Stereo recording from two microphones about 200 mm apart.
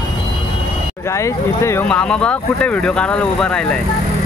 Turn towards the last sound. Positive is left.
turn(degrees=5)  # may be behind; listen again after turning